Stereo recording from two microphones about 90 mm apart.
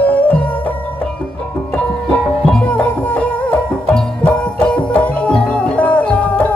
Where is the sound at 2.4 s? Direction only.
15° left (ahead or behind).